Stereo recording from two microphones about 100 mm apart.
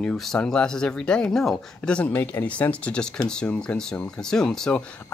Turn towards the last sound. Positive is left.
turn(degrees=5)  # may be behind; listen again after turning